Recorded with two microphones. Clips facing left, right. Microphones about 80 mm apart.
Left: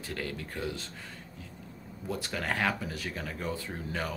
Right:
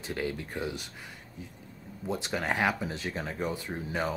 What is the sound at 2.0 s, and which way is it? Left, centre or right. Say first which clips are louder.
Speech: right 3 dB; right.